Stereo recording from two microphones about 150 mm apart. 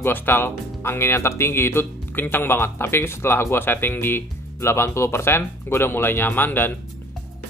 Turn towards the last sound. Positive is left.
turn(degrees=15)  # may be behind; listen again after turning